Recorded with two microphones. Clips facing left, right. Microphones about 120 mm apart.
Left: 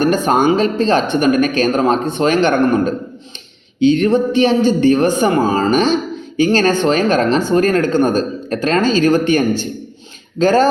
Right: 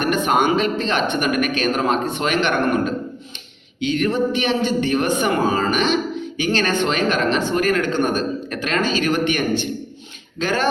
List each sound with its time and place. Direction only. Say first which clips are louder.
0.0 s a man's voice: left 5 dB; 35° left (ahead or behind)